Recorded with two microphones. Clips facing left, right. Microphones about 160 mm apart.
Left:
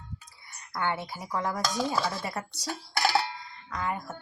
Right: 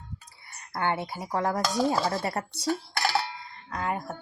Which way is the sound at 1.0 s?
25° right (ahead or behind).